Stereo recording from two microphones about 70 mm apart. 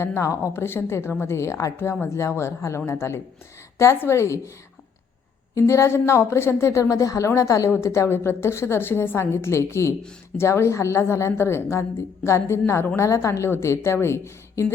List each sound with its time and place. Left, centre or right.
0.0 s a woman's voice: left
5.5 s a woman's voice: left